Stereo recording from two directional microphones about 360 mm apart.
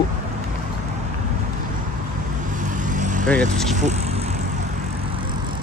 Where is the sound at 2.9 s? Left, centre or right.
Right.